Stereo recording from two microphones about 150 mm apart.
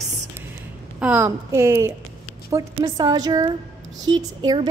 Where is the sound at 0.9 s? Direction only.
10° right (ahead or behind).